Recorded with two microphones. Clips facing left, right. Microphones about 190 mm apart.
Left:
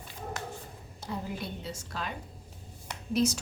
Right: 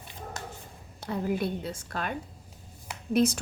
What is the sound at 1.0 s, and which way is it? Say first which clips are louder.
A woman's voice: right 7 dB; 60° right (ahead or behind).